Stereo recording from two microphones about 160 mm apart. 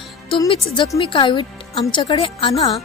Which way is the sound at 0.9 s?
30° left (ahead or behind).